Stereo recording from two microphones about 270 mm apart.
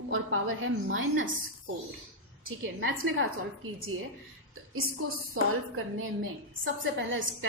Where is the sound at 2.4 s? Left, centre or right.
Right.